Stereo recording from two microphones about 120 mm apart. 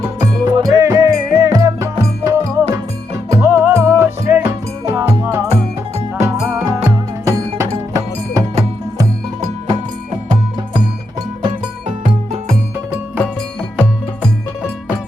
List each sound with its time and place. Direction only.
0.2 s music: 30° right (ahead or behind)